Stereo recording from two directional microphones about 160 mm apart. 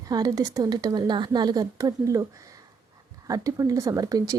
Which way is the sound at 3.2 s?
20° right (ahead or behind).